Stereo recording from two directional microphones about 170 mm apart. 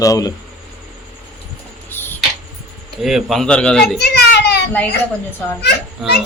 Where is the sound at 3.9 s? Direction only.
75° left (ahead or behind).